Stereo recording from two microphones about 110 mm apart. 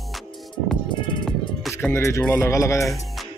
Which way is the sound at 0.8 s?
45° left (ahead or behind).